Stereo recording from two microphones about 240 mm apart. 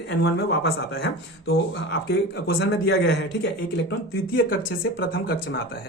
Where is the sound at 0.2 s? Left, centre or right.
Left.